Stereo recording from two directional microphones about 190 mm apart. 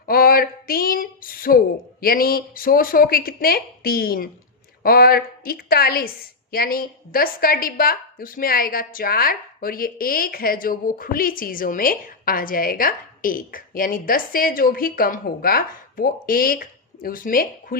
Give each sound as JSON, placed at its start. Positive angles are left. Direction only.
{"t": 0.0, "sound": "a woman's voice", "side_deg": 50}